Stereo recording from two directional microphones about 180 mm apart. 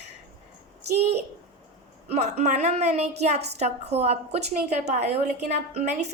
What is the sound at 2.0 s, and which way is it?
A woman's voice, 40° right (ahead or behind).